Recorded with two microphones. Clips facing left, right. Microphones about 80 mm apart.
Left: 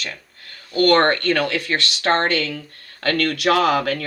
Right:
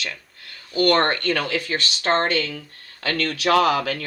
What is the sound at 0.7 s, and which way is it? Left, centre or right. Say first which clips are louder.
Speech: left 3 dB; left.